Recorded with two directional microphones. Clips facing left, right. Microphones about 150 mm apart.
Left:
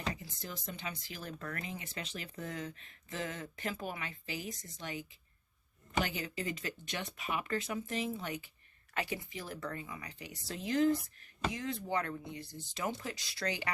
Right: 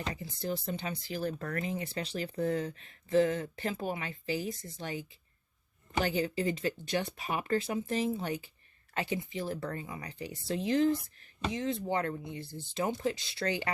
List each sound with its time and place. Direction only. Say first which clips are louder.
0.1 s speech: right 8 dB; 35° right (ahead or behind)